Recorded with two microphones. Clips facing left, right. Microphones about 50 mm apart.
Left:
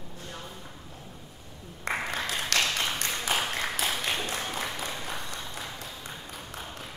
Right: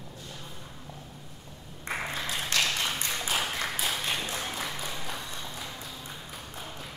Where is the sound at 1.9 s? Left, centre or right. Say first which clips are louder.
Left 3 dB; left.